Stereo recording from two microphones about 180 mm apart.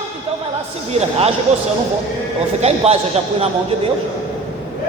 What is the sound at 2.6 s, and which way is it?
Speech, 35° right (ahead or behind).